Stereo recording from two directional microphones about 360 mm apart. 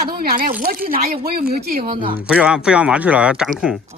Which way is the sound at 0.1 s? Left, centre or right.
Right.